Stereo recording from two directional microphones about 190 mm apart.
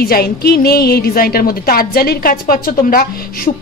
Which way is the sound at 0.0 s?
55° left (ahead or behind).